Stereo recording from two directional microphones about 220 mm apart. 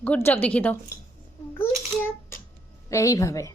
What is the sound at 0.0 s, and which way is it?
Speech, 10° left (ahead or behind).